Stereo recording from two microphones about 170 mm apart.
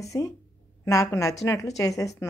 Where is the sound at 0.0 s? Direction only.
20° left (ahead or behind).